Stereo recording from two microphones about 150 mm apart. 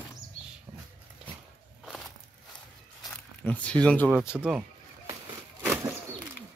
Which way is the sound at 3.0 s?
10° left (ahead or behind).